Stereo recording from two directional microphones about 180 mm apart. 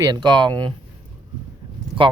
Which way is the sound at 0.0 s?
25° right (ahead or behind).